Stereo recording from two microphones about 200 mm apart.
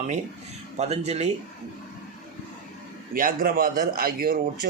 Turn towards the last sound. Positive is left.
turn(degrees=-45)  # may be behind; listen again after turning